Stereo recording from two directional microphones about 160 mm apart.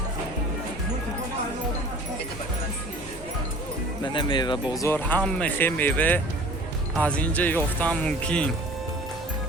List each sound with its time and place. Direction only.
4.0 s speech: 30° left (ahead or behind)
4.7 s speech: 15° left (ahead or behind)